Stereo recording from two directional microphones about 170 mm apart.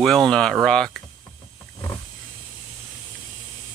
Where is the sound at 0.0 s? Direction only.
5° left (ahead or behind).